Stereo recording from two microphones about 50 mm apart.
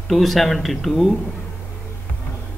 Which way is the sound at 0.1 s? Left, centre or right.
Centre.